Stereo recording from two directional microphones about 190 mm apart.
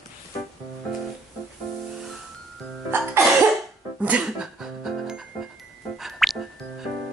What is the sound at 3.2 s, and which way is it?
Cough, 15° right (ahead or behind).